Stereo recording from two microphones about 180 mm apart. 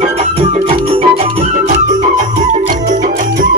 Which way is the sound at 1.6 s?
45° right (ahead or behind).